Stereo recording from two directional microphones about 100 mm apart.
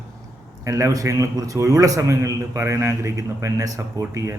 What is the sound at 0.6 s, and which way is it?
A man's voice, 30° right (ahead or behind).